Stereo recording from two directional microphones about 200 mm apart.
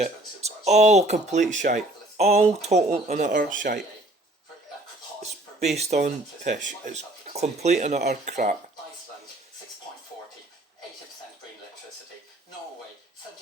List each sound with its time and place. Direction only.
0.0 s a sound: 35° right (ahead or behind)
1.3 s speech: 35° right (ahead or behind)
5.2 s speech: 35° right (ahead or behind)